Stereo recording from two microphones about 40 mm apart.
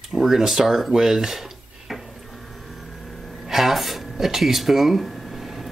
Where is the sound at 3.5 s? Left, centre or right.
Centre.